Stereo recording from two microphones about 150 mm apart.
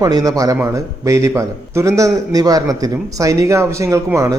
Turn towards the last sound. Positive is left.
turn(degrees=-20)  # may be behind; listen again after turning